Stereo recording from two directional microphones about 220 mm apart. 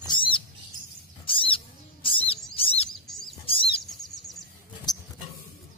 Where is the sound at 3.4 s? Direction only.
25° left (ahead or behind).